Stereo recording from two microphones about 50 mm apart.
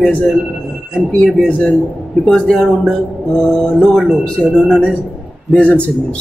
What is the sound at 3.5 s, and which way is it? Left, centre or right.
Speech, centre.